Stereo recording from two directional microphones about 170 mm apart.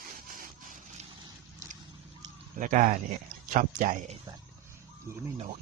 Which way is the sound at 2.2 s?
20° right (ahead or behind).